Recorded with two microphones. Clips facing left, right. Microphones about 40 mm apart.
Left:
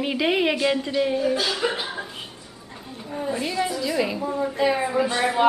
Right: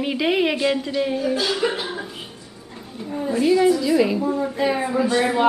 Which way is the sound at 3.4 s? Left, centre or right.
Centre.